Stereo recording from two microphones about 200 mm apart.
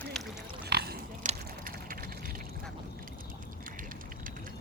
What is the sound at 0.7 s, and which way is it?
Pig, 55° right (ahead or behind).